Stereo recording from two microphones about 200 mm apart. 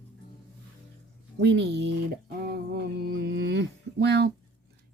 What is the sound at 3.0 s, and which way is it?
Mantra, 55° right (ahead or behind).